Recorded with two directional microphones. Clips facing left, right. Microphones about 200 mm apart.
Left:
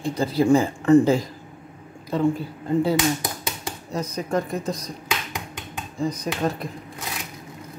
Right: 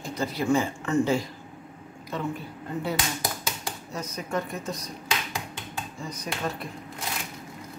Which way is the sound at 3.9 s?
35° left (ahead or behind).